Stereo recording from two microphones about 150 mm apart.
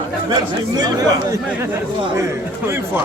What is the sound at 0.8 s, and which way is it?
Speech, 25° right (ahead or behind).